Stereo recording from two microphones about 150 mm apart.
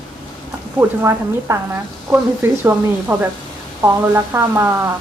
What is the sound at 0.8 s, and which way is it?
A woman's voice, 20° right (ahead or behind).